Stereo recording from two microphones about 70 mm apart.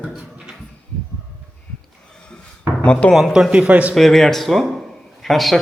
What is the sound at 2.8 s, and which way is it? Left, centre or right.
Speech, centre.